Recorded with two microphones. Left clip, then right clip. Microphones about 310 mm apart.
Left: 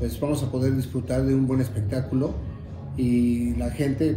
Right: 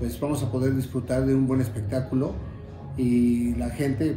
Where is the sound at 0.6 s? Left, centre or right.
Centre.